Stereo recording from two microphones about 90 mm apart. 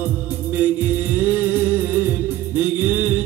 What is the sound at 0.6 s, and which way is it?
Music, 20° right (ahead or behind).